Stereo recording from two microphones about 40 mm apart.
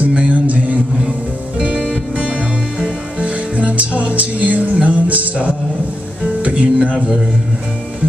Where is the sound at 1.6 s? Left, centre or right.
Right.